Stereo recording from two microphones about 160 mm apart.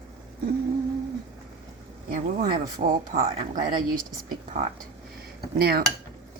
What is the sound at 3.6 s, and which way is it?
Speech, 30° right (ahead or behind).